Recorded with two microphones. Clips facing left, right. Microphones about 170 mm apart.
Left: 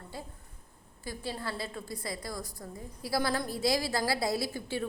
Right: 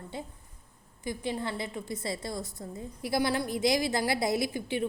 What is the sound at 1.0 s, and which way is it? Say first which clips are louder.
A woman's voice: right 4 dB; 20° right (ahead or behind).